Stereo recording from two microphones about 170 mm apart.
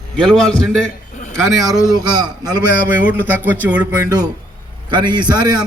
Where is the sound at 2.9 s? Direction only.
10° right (ahead or behind).